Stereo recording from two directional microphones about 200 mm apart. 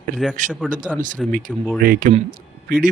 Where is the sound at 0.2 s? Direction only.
Centre (ahead or behind).